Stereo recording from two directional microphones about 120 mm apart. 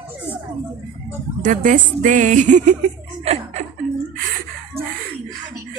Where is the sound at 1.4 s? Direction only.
90° right.